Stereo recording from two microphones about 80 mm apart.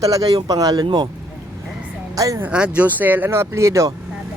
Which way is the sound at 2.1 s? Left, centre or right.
Right.